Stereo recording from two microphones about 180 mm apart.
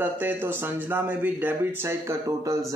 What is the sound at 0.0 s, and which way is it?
Speech, 10° right (ahead or behind).